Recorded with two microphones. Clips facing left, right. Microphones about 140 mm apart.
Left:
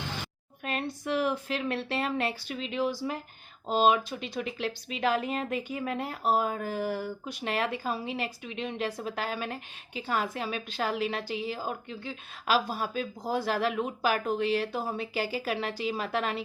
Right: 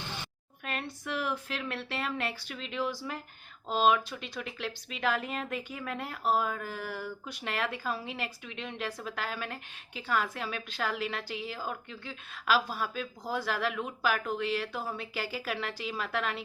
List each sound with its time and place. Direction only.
0.6 s speech: 25° left (ahead or behind)
2.6 s speech: 15° left (ahead or behind)